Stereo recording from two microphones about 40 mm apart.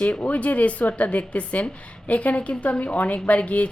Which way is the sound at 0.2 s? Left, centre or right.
Left.